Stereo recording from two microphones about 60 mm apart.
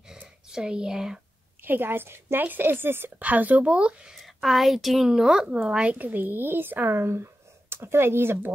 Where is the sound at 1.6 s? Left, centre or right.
Right.